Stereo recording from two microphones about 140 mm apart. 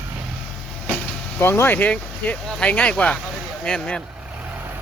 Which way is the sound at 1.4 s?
15° left (ahead or behind).